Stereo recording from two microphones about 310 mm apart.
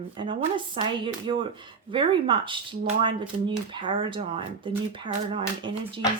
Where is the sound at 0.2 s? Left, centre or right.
Centre.